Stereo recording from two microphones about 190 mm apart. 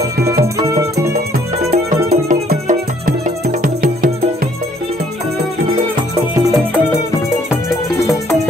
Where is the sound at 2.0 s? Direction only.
35° right (ahead or behind).